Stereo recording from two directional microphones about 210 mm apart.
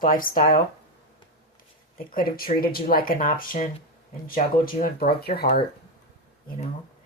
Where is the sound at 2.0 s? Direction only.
45° left (ahead or behind).